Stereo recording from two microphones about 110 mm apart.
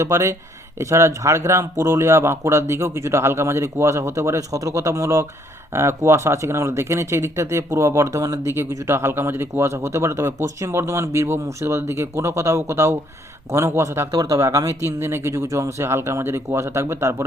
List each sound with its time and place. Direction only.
0.0 s speech: 25° right (ahead or behind)